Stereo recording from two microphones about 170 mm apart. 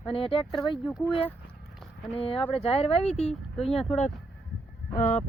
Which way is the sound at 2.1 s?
35° left (ahead or behind).